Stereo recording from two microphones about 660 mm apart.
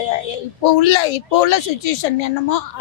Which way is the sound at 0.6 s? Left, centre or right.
Left.